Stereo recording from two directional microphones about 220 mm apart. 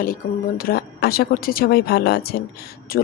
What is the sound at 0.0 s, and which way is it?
A woman's voice, 40° left (ahead or behind).